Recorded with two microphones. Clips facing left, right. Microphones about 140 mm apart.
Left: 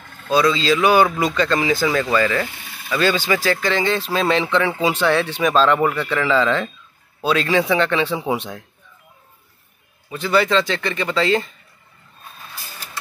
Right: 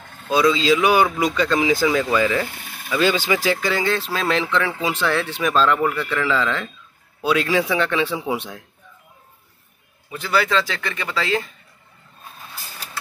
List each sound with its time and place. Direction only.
0.3 s speech: 15° right (ahead or behind)
10.1 s speech: centre (ahead or behind)